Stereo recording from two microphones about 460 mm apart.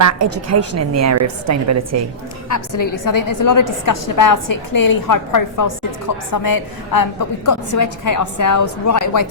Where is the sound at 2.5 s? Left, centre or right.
Left.